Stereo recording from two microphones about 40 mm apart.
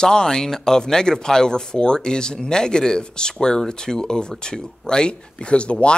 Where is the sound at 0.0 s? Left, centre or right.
Centre.